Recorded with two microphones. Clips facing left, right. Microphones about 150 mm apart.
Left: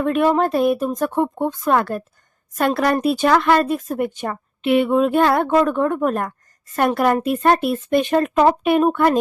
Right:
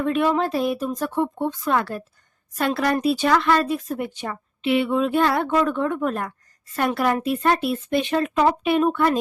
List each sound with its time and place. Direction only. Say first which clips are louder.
0.0 s speech: left 4 dB; 50° left (ahead or behind)